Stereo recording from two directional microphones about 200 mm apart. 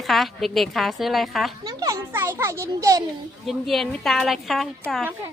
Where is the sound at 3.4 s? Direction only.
Centre (ahead or behind).